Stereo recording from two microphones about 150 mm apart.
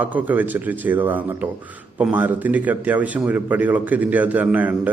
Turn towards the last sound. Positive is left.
turn(degrees=-10)  # may be behind; listen again after turning